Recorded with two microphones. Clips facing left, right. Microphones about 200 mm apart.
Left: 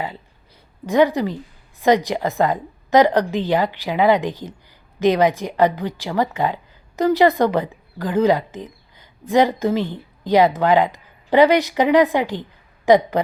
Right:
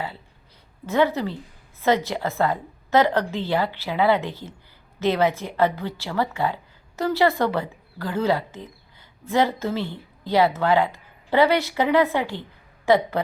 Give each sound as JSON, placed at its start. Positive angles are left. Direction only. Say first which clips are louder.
{"t": 0.9, "sound": "a woman's voice", "louder": "left 5 dB", "side_deg": 15}